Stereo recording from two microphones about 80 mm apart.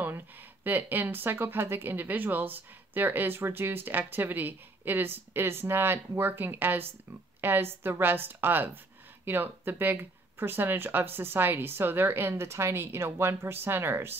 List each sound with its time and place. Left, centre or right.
0.7 s speech: right